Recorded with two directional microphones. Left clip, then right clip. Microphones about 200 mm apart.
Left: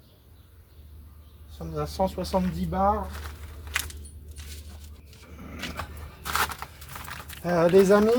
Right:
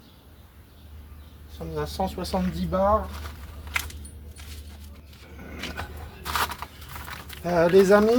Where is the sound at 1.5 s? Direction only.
15° left (ahead or behind).